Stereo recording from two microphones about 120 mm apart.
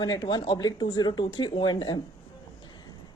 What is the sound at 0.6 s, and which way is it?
A woman's voice, 35° left (ahead or behind).